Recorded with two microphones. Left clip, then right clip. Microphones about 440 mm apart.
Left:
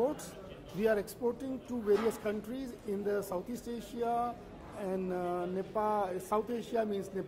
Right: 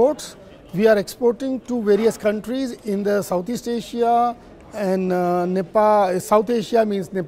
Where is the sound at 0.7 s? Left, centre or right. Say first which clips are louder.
Right 15 dB; right.